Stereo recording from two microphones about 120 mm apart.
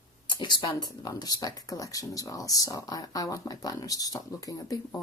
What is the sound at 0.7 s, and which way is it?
Speech, 30° left (ahead or behind).